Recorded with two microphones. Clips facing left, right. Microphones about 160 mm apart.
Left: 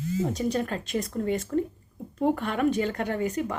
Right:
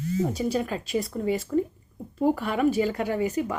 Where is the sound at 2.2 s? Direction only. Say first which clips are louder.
Right 2 dB; 5° right (ahead or behind).